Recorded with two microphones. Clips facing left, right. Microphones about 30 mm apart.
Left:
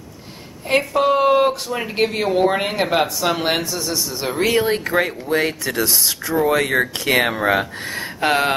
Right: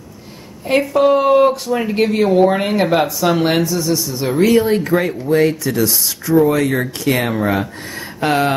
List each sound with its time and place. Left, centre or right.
0.7 s speech: centre
8.2 s speech: centre